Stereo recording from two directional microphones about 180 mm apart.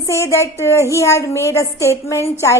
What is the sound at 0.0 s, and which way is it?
A woman's voice, 15° left (ahead or behind).